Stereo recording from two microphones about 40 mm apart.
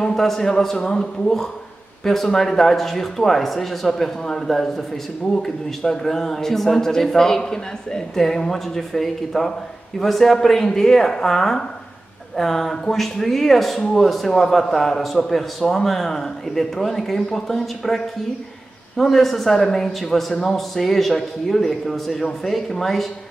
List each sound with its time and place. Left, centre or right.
0.0 s a man's voice: centre